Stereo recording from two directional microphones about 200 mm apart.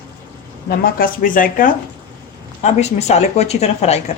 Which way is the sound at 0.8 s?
45° left (ahead or behind).